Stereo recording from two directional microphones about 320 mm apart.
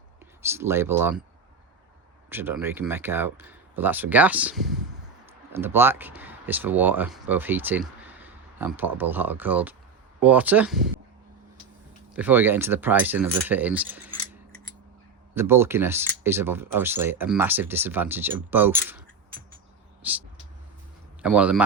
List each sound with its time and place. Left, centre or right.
0.4 s speech: centre
2.3 s speech: centre
12.1 s speech: centre
15.4 s a man's voice: centre